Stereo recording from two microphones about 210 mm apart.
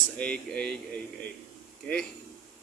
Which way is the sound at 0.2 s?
5° left (ahead or behind).